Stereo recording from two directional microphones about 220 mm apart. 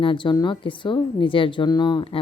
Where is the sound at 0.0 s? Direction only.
20° left (ahead or behind).